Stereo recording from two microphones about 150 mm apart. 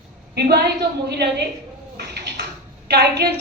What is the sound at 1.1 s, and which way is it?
Speech, 90° right.